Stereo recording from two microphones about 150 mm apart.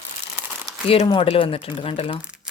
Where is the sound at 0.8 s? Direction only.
40° left (ahead or behind).